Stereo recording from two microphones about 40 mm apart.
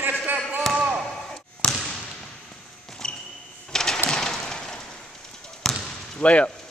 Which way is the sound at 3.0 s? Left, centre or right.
Centre.